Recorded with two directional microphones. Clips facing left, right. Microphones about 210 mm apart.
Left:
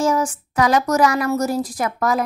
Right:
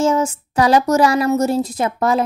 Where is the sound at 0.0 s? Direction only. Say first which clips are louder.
Right 3 dB; 25° right (ahead or behind).